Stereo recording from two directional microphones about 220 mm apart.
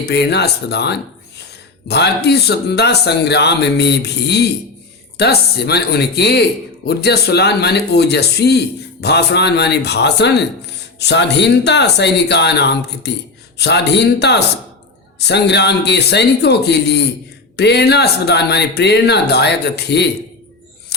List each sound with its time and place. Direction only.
0.0 s speech: 50° left (ahead or behind)